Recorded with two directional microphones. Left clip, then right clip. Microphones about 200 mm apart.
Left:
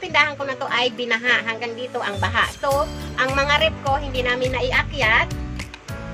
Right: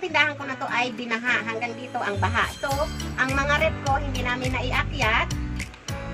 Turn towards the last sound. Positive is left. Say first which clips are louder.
# left 5 dB
turn(degrees=15)  # may be behind; listen again after turning